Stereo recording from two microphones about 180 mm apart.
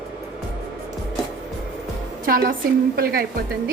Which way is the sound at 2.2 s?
55° right (ahead or behind).